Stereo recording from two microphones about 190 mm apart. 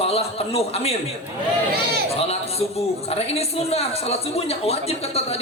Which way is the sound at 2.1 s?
30° left (ahead or behind).